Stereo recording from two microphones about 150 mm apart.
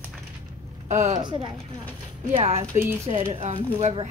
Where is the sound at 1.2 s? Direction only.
30° right (ahead or behind).